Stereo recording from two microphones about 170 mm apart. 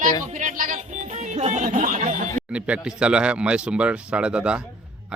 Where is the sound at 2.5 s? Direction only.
5° right (ahead or behind).